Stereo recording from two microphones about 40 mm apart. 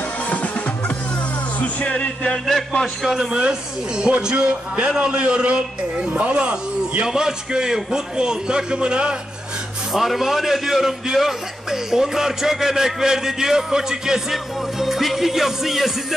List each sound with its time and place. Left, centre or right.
0.3 s music: left
1.9 s music: left
2.8 s a man's voice: centre
3.2 s a man's voice: right
7.1 s a man's voice: centre
9.9 s a man's voice: centre